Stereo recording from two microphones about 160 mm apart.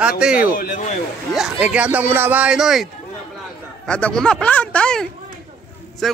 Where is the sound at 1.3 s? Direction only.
5° right (ahead or behind).